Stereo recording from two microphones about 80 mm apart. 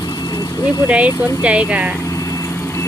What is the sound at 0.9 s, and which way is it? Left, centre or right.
Speech, centre.